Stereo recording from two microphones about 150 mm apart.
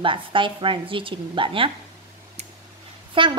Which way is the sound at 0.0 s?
35° right (ahead or behind).